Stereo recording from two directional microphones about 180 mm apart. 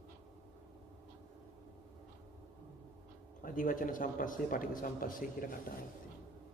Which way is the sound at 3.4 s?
50° left (ahead or behind).